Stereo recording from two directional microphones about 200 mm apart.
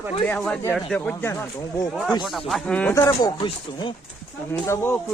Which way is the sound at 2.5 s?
5° left (ahead or behind).